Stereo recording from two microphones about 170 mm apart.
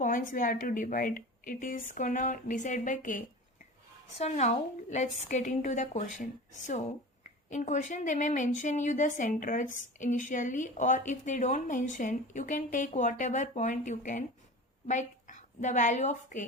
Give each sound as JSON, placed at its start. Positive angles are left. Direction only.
{"t": 0.0, "sound": "a woman's voice", "side_deg": 50}
{"t": 4.2, "sound": "a woman's voice", "side_deg": 40}